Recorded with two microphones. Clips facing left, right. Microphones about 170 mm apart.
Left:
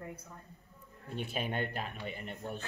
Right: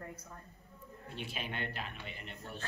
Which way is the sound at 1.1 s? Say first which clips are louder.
Left 6 dB; 50° left (ahead or behind).